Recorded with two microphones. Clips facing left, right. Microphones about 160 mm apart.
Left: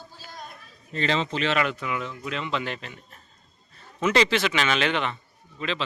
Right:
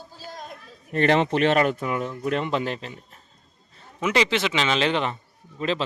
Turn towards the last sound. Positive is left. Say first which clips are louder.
# right 4 dB
turn(degrees=-40)  # may be behind; listen again after turning